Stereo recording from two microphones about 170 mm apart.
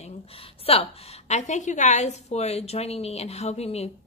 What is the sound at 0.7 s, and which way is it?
A woman's voice, 35° left (ahead or behind).